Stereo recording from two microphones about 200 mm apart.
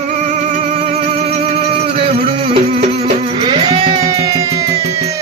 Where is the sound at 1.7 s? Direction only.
30° right (ahead or behind).